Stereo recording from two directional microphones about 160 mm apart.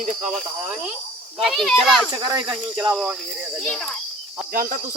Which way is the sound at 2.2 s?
15° right (ahead or behind).